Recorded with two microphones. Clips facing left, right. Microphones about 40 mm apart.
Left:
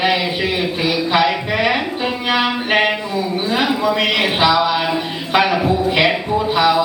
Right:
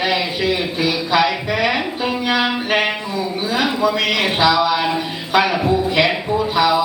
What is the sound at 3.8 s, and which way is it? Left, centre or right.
Speech, centre.